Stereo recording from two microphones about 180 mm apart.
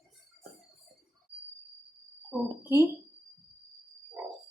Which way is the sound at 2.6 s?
10° right (ahead or behind).